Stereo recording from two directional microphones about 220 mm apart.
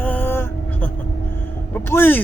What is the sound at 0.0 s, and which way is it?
Vehicle, 10° left (ahead or behind).